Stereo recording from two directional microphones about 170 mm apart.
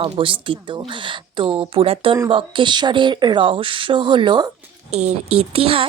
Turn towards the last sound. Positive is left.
turn(degrees=-35)  # may be behind; listen again after turning